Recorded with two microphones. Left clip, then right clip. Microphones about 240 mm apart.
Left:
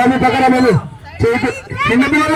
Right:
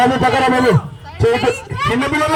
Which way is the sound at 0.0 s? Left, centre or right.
Right.